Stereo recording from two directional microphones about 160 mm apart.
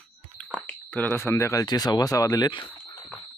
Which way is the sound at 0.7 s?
10° left (ahead or behind).